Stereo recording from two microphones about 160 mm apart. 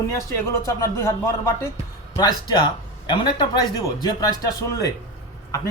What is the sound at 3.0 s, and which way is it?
Speech, 30° left (ahead or behind).